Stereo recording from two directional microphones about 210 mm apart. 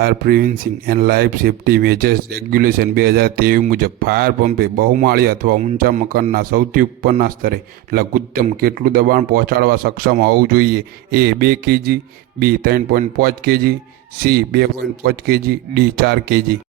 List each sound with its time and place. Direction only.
0.0 s speech: 45° right (ahead or behind)